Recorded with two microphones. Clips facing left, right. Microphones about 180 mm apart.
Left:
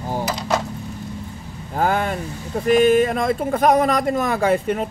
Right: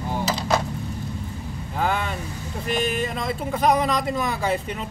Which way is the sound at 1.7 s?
45° left (ahead or behind).